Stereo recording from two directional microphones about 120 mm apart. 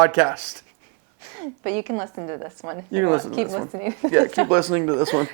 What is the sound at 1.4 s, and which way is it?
A woman's voice, 30° right (ahead or behind).